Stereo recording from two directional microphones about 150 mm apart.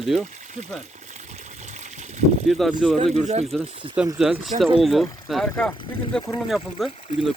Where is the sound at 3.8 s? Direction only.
35° right (ahead or behind).